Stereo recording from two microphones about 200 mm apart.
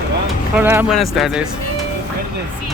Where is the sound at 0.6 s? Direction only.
10° right (ahead or behind).